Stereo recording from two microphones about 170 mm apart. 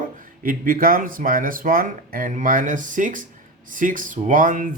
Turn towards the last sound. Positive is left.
turn(degrees=-50)  # may be behind; listen again after turning